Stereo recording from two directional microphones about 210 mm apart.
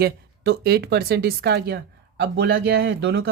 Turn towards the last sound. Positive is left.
turn(degrees=-55)  # may be behind; listen again after turning